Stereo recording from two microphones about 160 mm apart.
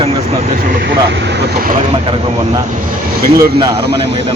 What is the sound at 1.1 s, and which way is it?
Speech, 80° right.